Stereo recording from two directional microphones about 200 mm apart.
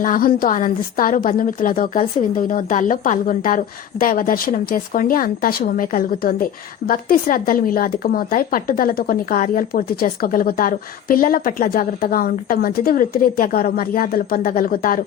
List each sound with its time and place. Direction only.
0.0 s a woman's voice: 45° left (ahead or behind)